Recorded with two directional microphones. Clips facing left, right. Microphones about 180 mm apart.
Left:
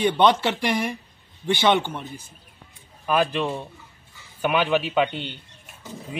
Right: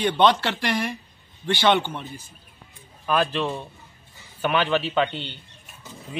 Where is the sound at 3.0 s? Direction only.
10° left (ahead or behind).